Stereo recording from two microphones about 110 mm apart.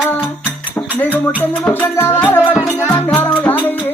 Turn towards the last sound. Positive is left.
turn(degrees=15)  # may be behind; listen again after turning